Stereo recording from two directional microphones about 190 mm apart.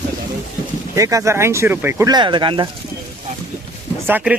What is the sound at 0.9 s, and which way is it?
Speech, 15° right (ahead or behind).